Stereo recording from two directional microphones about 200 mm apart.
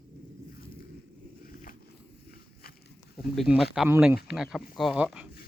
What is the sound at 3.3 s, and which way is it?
Speech, centre (ahead or behind).